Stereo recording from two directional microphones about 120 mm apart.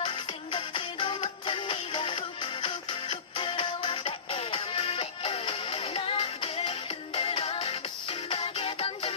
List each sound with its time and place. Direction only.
0.0 s music: 45° left (ahead or behind)